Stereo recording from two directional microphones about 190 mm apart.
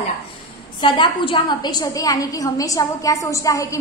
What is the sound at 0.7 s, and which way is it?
A woman's voice, 25° left (ahead or behind).